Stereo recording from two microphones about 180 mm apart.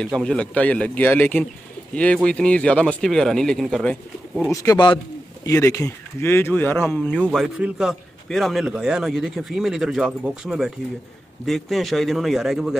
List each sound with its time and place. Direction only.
0.0 s a man's voice: 5° left (ahead or behind)
4.5 s speech: 20° left (ahead or behind)
7.2 s a man's voice: 5° right (ahead or behind)